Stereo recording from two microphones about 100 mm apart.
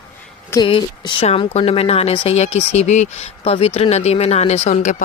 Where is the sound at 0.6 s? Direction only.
60° left (ahead or behind); by 4.6 s 90° left.